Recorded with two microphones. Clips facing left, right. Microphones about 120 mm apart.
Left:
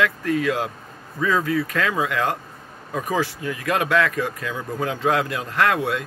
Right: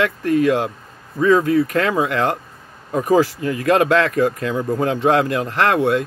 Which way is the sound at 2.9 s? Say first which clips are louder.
Right 9 dB; 30° right (ahead or behind).